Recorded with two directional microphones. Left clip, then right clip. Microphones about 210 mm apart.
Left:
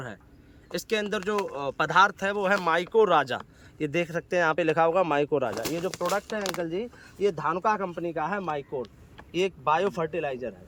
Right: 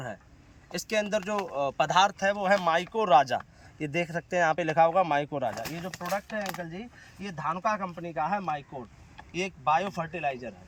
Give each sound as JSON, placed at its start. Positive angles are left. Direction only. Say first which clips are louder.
{"t": 0.7, "sound": "speech", "louder": "even", "side_deg": 5}
{"t": 5.9, "sound": "speech", "louder": "left 4 dB", "side_deg": 35}